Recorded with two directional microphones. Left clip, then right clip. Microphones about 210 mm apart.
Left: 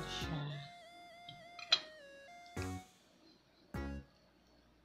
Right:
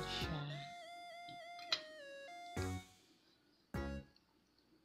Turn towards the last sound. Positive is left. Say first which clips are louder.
# even
turn(degrees=0)  # may be behind; listen again after turning